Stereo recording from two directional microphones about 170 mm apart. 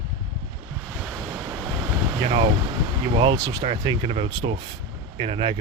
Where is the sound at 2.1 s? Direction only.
30° right (ahead or behind).